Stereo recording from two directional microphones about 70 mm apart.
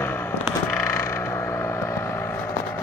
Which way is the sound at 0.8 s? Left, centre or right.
Left.